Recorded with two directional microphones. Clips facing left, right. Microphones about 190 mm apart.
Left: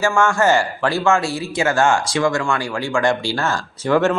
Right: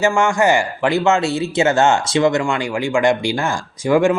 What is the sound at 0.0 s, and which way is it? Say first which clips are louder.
A man's voice: right 1 dB; 15° right (ahead or behind).